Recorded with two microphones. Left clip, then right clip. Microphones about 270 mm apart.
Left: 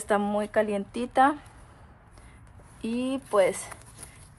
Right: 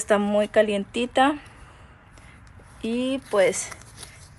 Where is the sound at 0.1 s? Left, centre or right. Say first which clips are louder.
Right 5 dB; centre.